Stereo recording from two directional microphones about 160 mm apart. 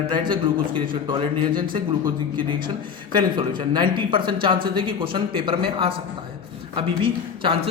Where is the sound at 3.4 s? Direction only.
30° right (ahead or behind).